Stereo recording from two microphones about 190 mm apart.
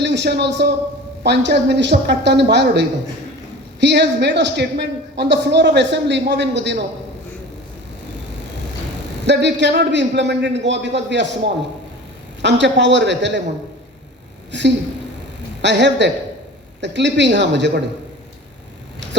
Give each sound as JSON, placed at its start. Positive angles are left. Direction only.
{"t": 0.0, "sound": "a man's voice", "side_deg": -65}
{"t": 9.2, "sound": "a man's voice", "side_deg": -65}
{"t": 14.5, "sound": "a man's voice", "side_deg": -65}